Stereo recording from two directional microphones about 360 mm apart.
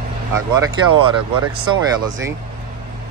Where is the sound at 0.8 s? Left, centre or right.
Right.